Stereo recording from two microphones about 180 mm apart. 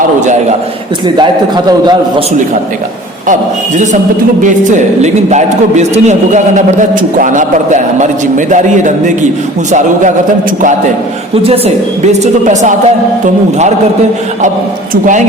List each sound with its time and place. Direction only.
1.0 s a man's voice: 25° right (ahead or behind)
4.4 s a man's voice: 40° right (ahead or behind)
11.4 s speech: 35° right (ahead or behind)